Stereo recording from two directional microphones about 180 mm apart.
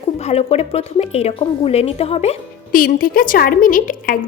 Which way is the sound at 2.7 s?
50° left (ahead or behind).